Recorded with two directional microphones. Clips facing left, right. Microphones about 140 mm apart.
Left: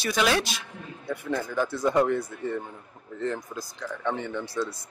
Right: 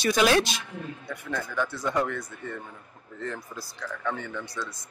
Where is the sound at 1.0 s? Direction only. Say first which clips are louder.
Left 7 dB; 30° left (ahead or behind).